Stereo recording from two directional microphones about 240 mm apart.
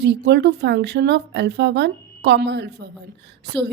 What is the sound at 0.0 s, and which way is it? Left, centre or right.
A woman's voice, right.